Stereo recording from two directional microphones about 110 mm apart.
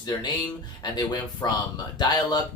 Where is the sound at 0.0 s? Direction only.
40° left (ahead or behind).